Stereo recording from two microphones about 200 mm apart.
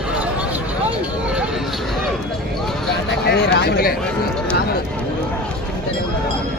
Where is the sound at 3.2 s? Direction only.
55° left (ahead or behind).